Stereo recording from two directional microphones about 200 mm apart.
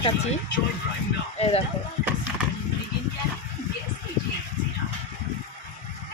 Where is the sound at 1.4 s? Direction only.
30° left (ahead or behind).